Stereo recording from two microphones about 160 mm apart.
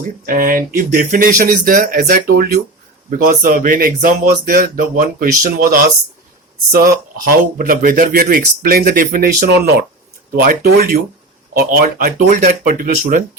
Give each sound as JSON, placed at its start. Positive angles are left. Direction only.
{"t": 0.3, "sound": "speech", "side_deg": -60}
{"t": 3.1, "sound": "speech", "side_deg": -60}
{"t": 10.4, "sound": "speech", "side_deg": -70}